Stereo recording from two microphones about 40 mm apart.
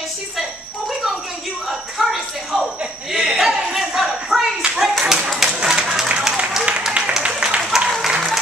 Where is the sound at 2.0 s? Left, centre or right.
Centre.